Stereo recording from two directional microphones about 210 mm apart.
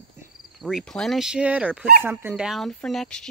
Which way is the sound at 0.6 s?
Centre (ahead or behind).